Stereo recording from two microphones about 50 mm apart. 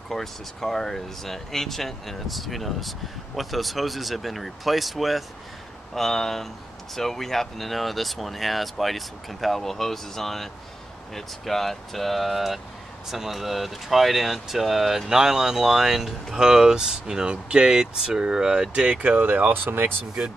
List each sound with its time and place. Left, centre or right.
0.1 s speech: centre
18.7 s speech: right
19.5 s speech: right